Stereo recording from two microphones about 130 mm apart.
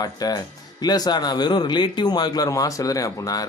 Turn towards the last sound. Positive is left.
turn(degrees=25)  # may be behind; listen again after turning